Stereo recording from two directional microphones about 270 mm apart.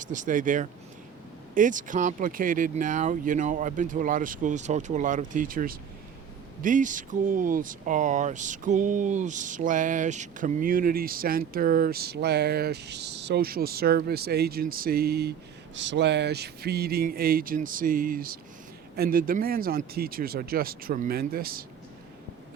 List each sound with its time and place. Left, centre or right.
0.0 s speech: right